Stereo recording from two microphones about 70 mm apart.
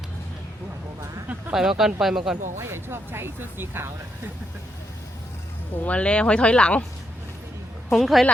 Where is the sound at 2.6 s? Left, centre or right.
Right.